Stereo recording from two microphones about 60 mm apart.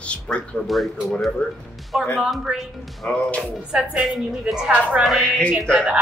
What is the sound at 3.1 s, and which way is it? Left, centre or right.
Speech, left.